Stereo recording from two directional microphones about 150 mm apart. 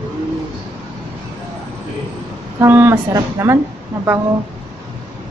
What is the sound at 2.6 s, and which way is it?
Speech, 15° right (ahead or behind).